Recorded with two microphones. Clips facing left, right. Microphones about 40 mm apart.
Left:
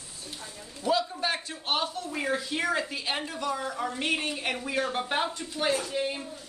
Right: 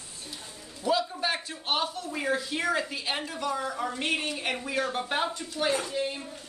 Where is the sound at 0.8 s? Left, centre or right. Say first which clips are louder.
Even; centre.